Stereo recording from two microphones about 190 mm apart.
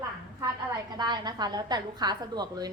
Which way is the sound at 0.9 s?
20° right (ahead or behind).